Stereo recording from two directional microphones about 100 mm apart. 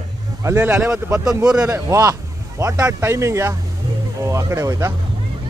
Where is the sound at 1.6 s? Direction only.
35° right (ahead or behind).